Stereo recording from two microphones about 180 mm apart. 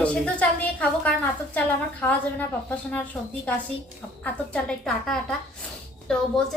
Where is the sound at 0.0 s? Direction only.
5° left (ahead or behind).